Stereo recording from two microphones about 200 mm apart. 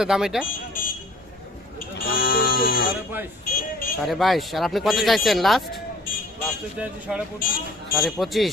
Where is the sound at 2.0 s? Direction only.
45° left (ahead or behind).